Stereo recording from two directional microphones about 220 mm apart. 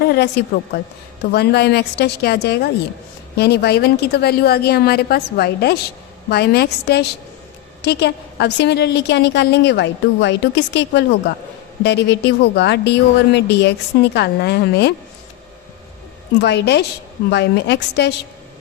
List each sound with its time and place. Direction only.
0.1 s a woman's voice: 50° left (ahead or behind)
16.4 s a woman's voice: 50° left (ahead or behind)